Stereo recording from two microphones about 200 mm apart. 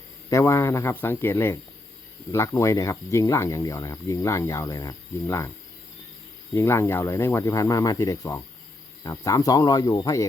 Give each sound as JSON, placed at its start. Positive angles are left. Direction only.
{"t": 0.3, "sound": "speech", "side_deg": 15}
{"t": 6.5, "sound": "speech", "side_deg": 15}